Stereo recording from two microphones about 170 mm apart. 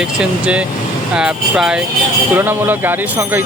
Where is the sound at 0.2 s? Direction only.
5° right (ahead or behind).